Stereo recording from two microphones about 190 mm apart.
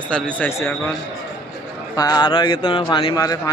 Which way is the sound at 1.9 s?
20° left (ahead or behind).